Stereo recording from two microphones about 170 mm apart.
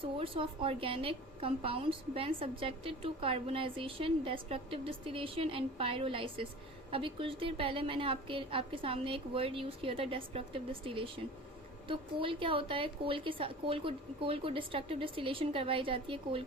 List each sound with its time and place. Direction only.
0.0 s a woman's voice: 30° right (ahead or behind)